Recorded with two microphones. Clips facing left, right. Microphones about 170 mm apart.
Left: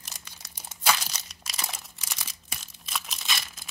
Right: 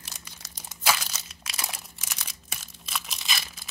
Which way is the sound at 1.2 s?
5° right (ahead or behind).